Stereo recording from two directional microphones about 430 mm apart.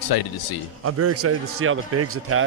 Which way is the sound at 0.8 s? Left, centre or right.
Right.